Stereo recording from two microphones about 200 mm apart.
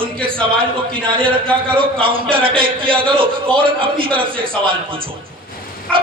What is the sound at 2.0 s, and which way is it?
Speech, 25° right (ahead or behind).